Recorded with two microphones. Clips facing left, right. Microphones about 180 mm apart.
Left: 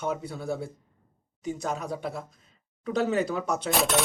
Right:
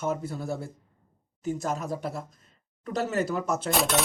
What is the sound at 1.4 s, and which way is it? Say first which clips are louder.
Speech: right 1 dB; centre (ahead or behind).